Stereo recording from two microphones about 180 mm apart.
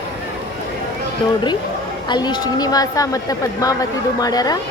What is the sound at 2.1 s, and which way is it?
A woman's voice, 25° left (ahead or behind).